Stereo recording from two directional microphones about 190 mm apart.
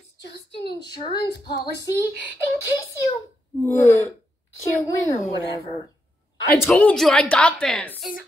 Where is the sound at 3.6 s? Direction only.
15° left (ahead or behind).